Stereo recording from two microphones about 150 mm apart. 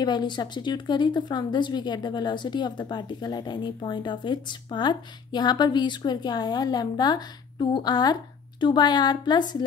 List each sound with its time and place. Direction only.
0.0 s speech: 30° left (ahead or behind)